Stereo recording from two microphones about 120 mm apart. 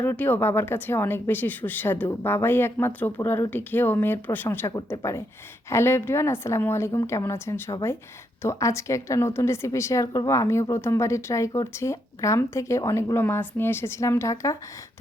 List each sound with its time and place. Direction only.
0.0 s a woman's voice: 15° left (ahead or behind)